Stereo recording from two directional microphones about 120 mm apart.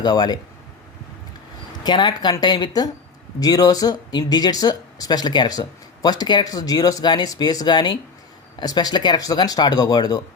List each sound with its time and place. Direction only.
0.0 s speech: 35° left (ahead or behind)
1.8 s speech: 40° left (ahead or behind)